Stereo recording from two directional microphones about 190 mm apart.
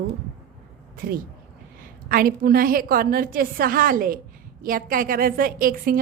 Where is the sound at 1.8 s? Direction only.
50° right (ahead or behind).